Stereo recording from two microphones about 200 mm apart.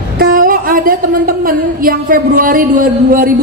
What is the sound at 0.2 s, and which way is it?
A woman's voice, 45° right (ahead or behind).